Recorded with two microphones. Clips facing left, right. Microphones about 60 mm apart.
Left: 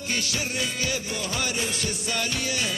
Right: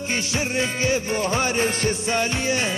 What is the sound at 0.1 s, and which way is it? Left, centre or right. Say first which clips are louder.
Music: right 4 dB; right.